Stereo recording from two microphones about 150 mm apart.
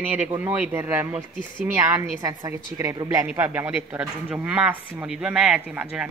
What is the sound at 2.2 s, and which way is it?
A woman's voice, 20° right (ahead or behind).